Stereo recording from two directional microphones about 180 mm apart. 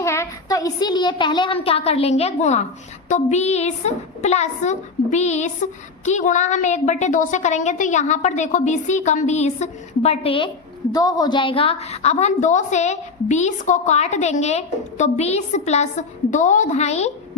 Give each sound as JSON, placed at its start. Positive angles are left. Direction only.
{"t": 0.0, "sound": "a woman's voice", "side_deg": 15}